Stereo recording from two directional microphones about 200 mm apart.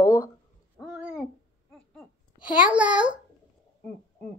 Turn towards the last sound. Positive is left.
turn(degrees=-5)  # may be behind; listen again after turning